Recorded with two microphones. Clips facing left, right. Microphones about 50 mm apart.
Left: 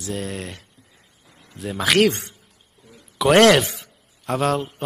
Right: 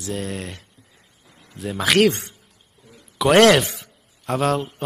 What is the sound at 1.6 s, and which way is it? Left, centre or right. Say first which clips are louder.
Mantra: right 1 dB; centre.